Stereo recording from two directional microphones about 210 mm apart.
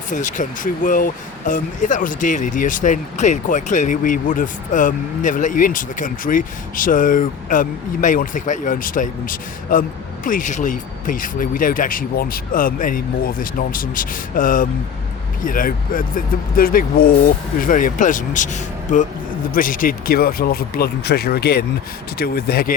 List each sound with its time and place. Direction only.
0.1 s speech: 35° left (ahead or behind)